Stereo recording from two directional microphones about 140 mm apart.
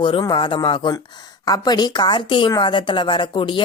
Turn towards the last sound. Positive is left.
turn(degrees=35)  # may be behind; listen again after turning